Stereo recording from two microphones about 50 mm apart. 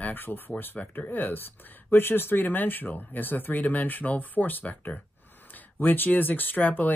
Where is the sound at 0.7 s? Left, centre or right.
Left.